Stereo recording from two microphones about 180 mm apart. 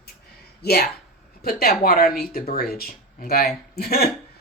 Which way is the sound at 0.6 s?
60° left (ahead or behind).